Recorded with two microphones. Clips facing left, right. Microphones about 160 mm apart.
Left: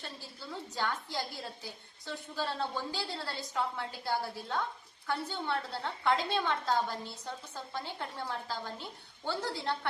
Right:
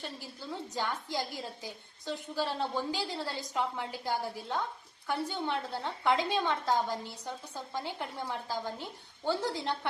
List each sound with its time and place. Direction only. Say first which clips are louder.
0.7 s a woman's voice: even; 15° right (ahead or behind)